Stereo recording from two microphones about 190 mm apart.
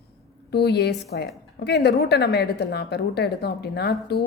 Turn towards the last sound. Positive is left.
turn(degrees=60)  # may be behind; listen again after turning